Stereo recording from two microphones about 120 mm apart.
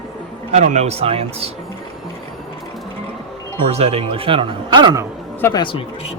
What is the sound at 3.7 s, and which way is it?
A man's voice, 55° right (ahead or behind).